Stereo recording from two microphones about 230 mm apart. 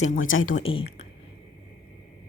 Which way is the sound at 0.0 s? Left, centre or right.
Left.